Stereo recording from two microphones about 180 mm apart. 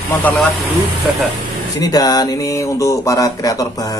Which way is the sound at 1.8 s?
20° left (ahead or behind).